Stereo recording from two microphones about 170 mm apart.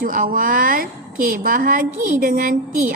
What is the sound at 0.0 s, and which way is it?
A woman's voice, 55° right (ahead or behind).